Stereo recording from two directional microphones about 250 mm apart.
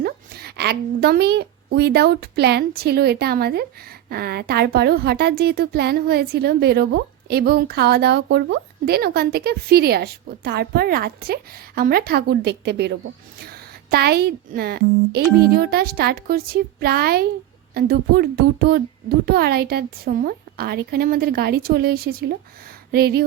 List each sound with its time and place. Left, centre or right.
0.0 s a woman's voice: right